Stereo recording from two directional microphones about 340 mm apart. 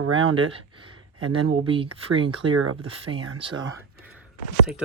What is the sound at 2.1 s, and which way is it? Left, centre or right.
Speech, right.